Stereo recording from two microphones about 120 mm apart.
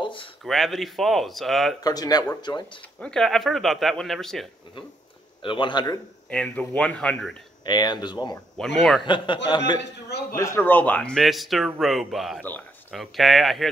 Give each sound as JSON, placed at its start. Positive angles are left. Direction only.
{"t": 0.0, "sound": "a sound", "side_deg": 45}
{"t": 0.4, "sound": "speech", "side_deg": 0}
{"t": 1.8, "sound": "speech", "side_deg": 30}
{"t": 3.0, "sound": "speech", "side_deg": 5}
{"t": 5.4, "sound": "speech", "side_deg": 45}
{"t": 6.3, "sound": "speech", "side_deg": 10}
{"t": 7.6, "sound": "speech", "side_deg": 35}
{"t": 8.5, "sound": "speech", "side_deg": 5}
{"t": 9.0, "sound": "speech", "side_deg": 40}
{"t": 10.3, "sound": "speech", "side_deg": 20}